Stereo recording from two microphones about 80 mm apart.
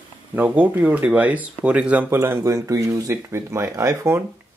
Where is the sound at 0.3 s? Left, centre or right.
Right.